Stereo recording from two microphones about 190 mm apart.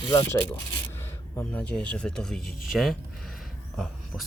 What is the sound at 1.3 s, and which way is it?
Speech, 10° left (ahead or behind).